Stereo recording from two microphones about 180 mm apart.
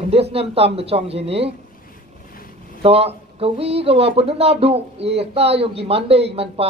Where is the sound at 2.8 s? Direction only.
35° right (ahead or behind).